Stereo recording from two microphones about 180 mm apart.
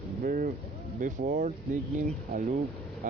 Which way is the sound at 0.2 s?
50° right (ahead or behind).